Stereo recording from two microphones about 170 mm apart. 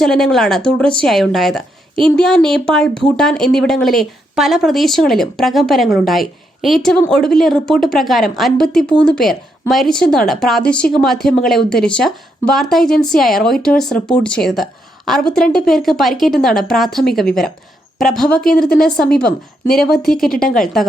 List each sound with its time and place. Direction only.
0.0 s a woman's voice: centre (ahead or behind)
20.4 s a woman's voice: 55° left (ahead or behind)